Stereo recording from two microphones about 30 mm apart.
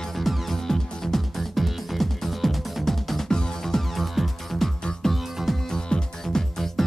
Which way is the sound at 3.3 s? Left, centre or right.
Left.